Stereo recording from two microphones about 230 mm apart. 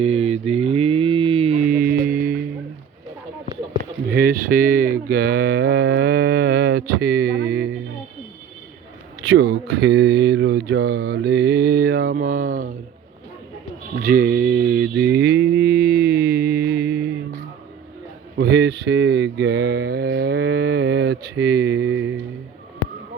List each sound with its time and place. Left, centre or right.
0.0 s mantra: right
4.1 s mantra: right
9.2 s mantra: right
14.0 s mantra: right
18.3 s mantra: right